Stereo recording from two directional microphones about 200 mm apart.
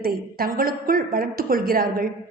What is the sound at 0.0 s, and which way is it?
A woman's voice, 45° right (ahead or behind).